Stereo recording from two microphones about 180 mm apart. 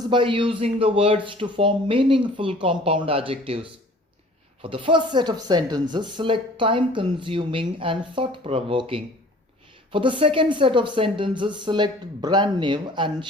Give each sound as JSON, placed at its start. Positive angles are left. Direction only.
{"t": 0.1, "sound": "speech", "side_deg": -30}